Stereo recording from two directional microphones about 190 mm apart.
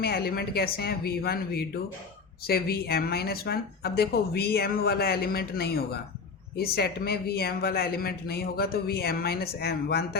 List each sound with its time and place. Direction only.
0.0 s speech: 55° left (ahead or behind)